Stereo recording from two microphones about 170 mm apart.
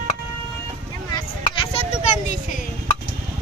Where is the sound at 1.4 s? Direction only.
30° left (ahead or behind).